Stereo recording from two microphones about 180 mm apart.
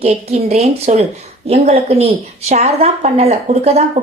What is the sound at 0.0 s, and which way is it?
A woman's voice, 35° right (ahead or behind).